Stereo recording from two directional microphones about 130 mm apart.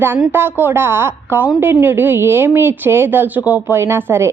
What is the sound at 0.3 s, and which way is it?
A woman's voice, 15° right (ahead or behind).